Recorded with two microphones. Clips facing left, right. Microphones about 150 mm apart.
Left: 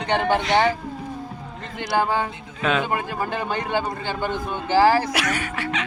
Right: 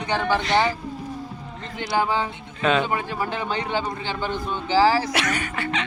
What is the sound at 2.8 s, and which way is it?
A man's voice, 50° left (ahead or behind).